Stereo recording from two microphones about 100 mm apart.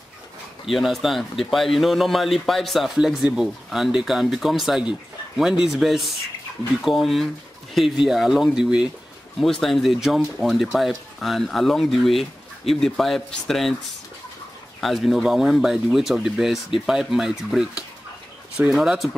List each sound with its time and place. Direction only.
0.7 s speech: centre (ahead or behind)
9.4 s speech: 5° left (ahead or behind)
14.8 s speech: centre (ahead or behind)